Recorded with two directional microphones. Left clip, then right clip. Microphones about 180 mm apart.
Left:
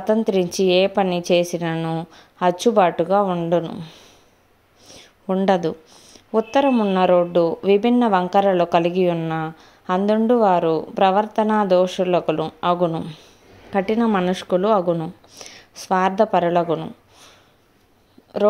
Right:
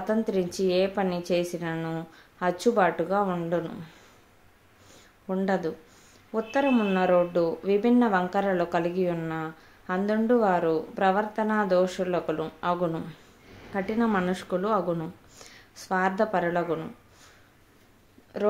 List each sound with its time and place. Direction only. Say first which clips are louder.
0.0 s speech: left 8 dB; 35° left (ahead or behind)
5.2 s speech: left 9 dB; 35° left (ahead or behind)
18.3 s speech: left 9 dB; 30° left (ahead or behind)